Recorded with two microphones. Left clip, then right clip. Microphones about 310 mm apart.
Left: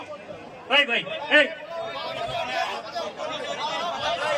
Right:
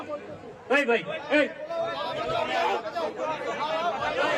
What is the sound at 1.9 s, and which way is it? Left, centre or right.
Chatter, centre.